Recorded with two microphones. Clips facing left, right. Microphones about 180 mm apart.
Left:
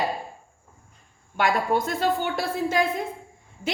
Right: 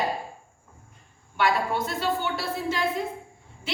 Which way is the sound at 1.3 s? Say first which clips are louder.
Left 2 dB; 45° left (ahead or behind).